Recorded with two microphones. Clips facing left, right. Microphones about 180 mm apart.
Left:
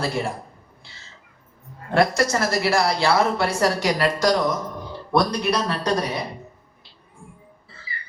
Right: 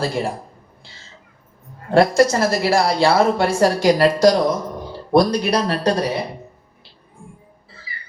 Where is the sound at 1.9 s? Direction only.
30° right (ahead or behind).